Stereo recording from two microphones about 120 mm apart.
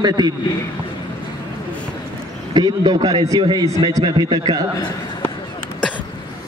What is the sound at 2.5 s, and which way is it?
A man's voice, 35° right (ahead or behind).